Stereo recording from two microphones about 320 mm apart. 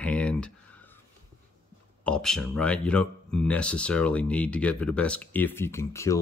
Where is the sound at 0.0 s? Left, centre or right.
Centre.